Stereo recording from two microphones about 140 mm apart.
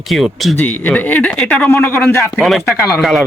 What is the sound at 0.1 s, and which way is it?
Speech, centre (ahead or behind).